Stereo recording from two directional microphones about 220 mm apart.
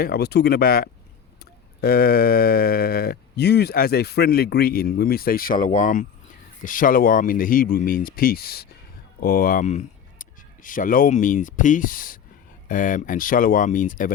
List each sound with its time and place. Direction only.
0.0 s speech: 45° left (ahead or behind)